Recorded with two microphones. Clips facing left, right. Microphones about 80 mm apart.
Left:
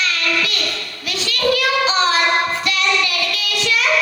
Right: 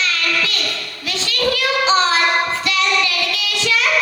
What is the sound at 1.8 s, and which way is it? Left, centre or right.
Child singing, right.